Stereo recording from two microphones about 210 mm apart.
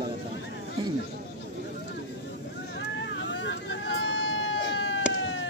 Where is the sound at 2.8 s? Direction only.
55° left (ahead or behind).